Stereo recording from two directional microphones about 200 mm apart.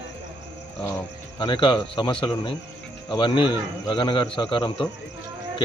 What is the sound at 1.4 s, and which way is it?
Speech, 25° left (ahead or behind).